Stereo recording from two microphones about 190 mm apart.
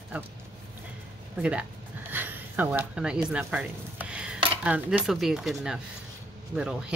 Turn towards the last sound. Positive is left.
turn(degrees=-5)  # may be behind; listen again after turning